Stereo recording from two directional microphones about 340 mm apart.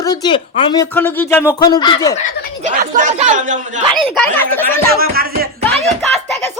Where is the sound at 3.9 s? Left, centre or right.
Centre.